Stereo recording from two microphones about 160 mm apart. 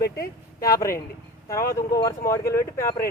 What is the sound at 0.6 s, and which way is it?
Speech, 20° left (ahead or behind).